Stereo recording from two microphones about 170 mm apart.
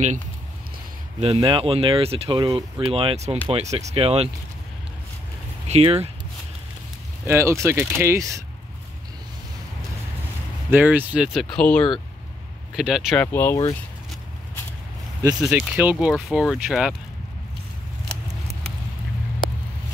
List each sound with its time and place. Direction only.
1.2 s speech: 30° right (ahead or behind)
5.7 s speech: 35° right (ahead or behind)
7.2 s speech: 15° right (ahead or behind)
10.7 s speech: 10° right (ahead or behind)
11.5 s speech: 5° left (ahead or behind)
12.7 s speech: 5° right (ahead or behind)
13.2 s speech: 15° left (ahead or behind)
15.4 s speech: 5° right (ahead or behind)